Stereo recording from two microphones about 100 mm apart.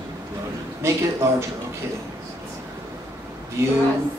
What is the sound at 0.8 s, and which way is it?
Speech, 25° right (ahead or behind).